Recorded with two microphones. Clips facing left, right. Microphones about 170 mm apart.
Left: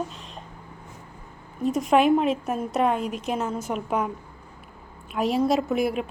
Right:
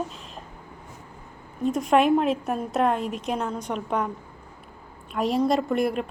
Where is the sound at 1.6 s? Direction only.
Centre (ahead or behind).